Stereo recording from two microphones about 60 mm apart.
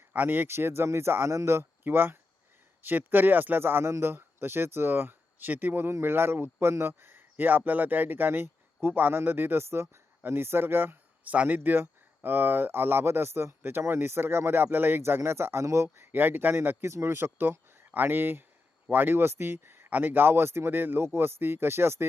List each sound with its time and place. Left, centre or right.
0.1 s speech: right
1.8 s speech: right
11.2 s speech: right
16.1 s speech: right
19.9 s speech: right